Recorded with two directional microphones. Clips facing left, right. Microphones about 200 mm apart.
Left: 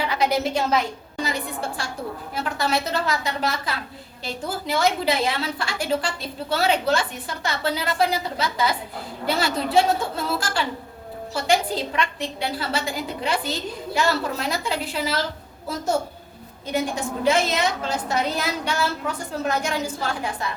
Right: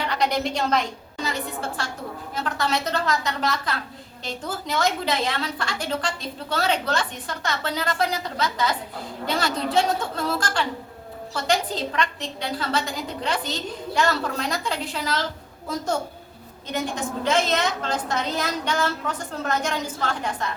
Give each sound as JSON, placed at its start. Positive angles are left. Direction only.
{"t": 0.0, "sound": "a woman's voice", "side_deg": 5}
{"t": 16.7, "sound": "a woman's voice", "side_deg": 10}